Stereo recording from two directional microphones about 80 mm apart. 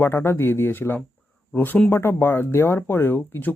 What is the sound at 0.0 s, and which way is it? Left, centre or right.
Speech, left.